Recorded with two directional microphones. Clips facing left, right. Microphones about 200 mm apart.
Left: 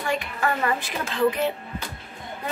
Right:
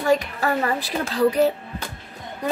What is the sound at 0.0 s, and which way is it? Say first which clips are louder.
A woman's voice: right 6 dB; 40° right (ahead or behind).